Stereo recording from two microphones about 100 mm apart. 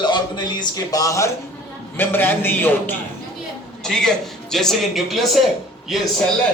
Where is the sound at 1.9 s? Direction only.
20° left (ahead or behind).